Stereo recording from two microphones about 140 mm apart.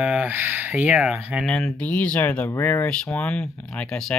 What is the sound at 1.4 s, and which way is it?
Speech, 5° left (ahead or behind).